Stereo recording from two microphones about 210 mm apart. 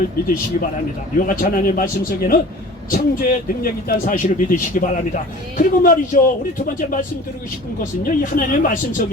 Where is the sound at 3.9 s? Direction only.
40° left (ahead or behind).